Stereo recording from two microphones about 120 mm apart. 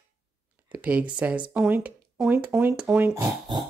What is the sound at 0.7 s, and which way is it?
Speech, 10° right (ahead or behind).